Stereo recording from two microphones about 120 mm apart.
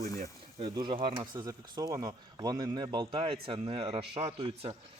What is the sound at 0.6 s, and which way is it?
A man's voice, 45° right (ahead or behind).